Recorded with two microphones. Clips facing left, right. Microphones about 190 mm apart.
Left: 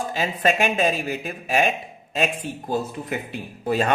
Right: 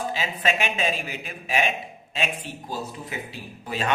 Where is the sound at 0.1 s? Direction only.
45° left (ahead or behind).